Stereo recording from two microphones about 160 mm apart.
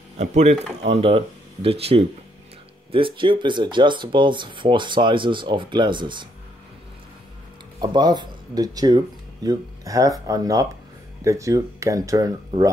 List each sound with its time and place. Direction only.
0.2 s speech: 45° right (ahead or behind); by 6.2 s 30° right (ahead or behind)
7.8 s speech: 25° right (ahead or behind)